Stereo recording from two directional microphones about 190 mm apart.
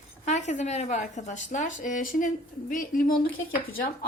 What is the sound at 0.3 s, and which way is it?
Speech, 40° left (ahead or behind).